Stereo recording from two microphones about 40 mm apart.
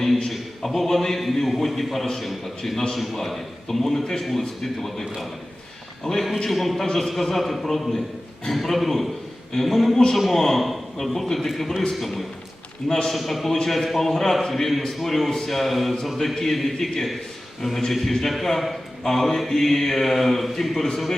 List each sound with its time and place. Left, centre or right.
0.3 s a man's voice: centre
6.5 s a man's voice: centre
12.9 s a man's voice: centre
13.1 s a man's voice: centre